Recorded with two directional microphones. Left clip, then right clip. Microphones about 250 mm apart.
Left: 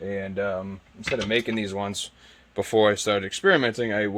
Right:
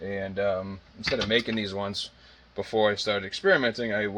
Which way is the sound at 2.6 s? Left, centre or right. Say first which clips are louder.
Left 4 dB; left.